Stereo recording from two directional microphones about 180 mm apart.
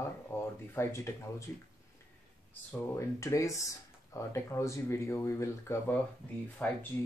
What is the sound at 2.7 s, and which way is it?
Speech, 15° left (ahead or behind).